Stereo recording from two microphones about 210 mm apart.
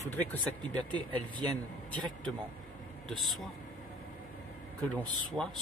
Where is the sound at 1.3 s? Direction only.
20° right (ahead or behind).